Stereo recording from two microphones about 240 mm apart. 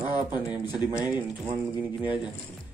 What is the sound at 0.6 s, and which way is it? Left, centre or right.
Speech, centre.